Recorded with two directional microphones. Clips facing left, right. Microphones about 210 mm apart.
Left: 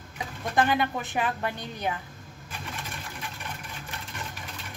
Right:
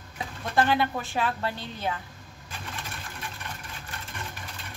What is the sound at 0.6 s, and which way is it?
A woman's voice, 15° left (ahead or behind).